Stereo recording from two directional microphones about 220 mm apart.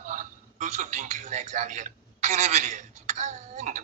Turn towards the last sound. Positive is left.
turn(degrees=-35)  # may be behind; listen again after turning